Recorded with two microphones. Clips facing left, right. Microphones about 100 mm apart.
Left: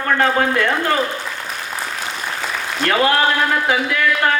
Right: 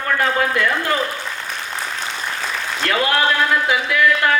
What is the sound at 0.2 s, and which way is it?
Speech, 35° left (ahead or behind).